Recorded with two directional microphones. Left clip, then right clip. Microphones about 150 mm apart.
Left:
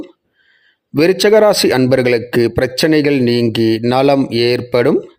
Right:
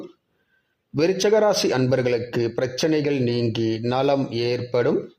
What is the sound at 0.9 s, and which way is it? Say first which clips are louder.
A man's voice: left 9 dB; 45° left (ahead or behind).